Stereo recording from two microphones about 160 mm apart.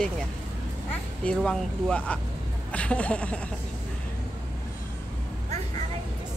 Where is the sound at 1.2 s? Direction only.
5° left (ahead or behind).